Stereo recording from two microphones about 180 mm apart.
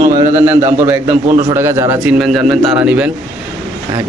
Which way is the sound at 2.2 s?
Centre (ahead or behind).